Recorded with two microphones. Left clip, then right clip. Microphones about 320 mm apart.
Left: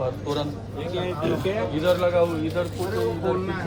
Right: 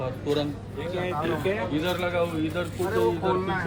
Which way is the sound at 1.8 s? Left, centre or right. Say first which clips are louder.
Left 10 dB; right.